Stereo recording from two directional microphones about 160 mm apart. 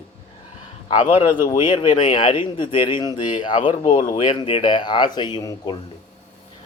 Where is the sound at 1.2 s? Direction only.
30° left (ahead or behind).